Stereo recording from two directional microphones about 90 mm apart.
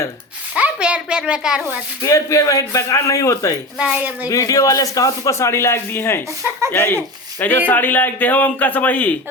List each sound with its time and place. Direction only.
0.5 s a sound: 15° right (ahead or behind)
2.0 s speech: 35° left (ahead or behind)
3.9 s speech: 20° right (ahead or behind)
4.3 s speech: 40° left (ahead or behind); by 9.1 s 20° left (ahead or behind)